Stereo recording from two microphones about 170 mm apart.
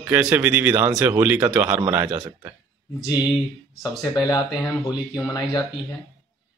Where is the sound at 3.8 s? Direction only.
20° left (ahead or behind).